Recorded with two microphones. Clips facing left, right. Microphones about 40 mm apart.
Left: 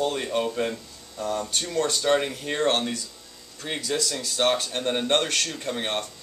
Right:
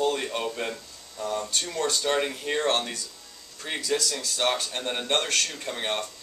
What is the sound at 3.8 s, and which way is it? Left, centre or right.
Speech, centre.